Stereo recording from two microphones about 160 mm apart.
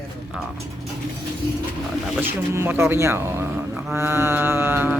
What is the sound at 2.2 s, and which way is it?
Speech, 15° right (ahead or behind).